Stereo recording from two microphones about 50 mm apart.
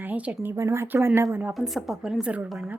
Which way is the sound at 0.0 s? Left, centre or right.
Right.